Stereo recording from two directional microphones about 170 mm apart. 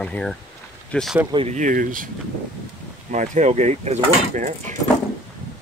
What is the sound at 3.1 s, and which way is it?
Speech, 45° right (ahead or behind).